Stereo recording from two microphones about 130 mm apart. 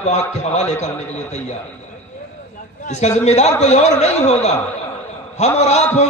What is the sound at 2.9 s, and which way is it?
A man's voice, 60° left (ahead or behind).